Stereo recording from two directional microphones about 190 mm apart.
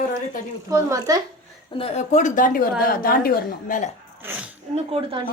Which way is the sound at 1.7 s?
30° left (ahead or behind).